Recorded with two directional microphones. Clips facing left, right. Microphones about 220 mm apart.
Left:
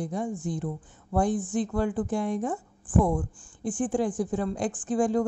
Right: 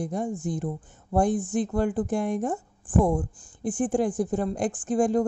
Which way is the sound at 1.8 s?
45° right (ahead or behind).